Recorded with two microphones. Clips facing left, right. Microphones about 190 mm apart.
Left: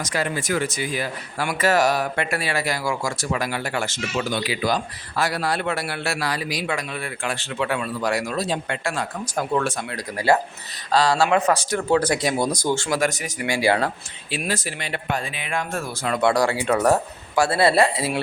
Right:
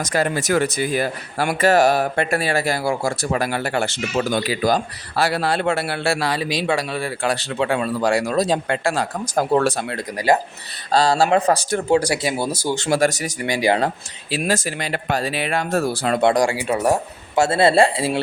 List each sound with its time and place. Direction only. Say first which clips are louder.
0.1 s speech: right 5 dB; 45° right (ahead or behind)
2.3 s speech: right 4 dB; 45° right (ahead or behind)
10.9 s speech: right 2 dB; 30° right (ahead or behind)
11.9 s speech: right 1 dB; 10° right (ahead or behind)
12.9 s speech: right 4 dB; 35° right (ahead or behind)
13.5 s speech: right 2 dB; 20° right (ahead or behind)
14.3 s speech: right 5 dB; 40° right (ahead or behind)
16.2 s speech: right 1 dB; 20° right (ahead or behind)